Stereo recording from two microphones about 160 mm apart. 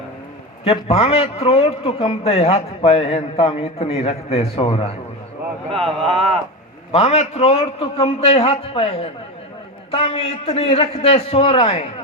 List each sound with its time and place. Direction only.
0.6 s a man's voice: 40° left (ahead or behind)
5.8 s speech: centre (ahead or behind)
6.9 s a man's voice: 40° left (ahead or behind)